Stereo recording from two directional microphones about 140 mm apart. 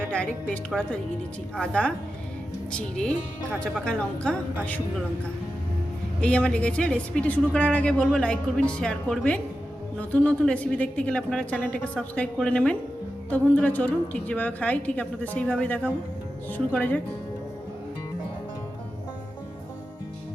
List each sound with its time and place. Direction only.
0.0 s a woman's voice: 10° left (ahead or behind)
6.1 s a woman's voice: 5° left (ahead or behind)